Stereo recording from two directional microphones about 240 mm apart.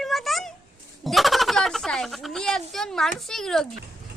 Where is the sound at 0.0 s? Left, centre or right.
Centre.